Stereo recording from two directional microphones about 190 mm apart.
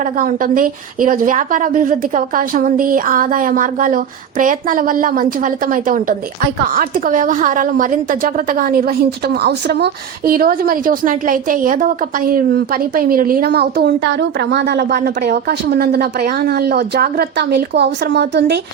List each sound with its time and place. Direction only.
0.0 s a woman's voice: 45° right (ahead or behind)